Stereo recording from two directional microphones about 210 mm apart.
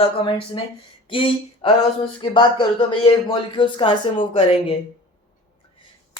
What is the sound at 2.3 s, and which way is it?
Speech, 25° left (ahead or behind).